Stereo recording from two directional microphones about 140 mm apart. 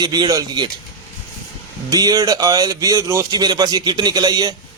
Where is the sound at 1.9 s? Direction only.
25° right (ahead or behind).